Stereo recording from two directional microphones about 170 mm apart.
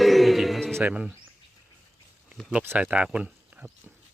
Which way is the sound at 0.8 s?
10° right (ahead or behind).